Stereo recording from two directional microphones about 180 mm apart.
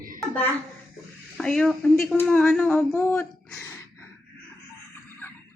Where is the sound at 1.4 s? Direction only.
5° left (ahead or behind).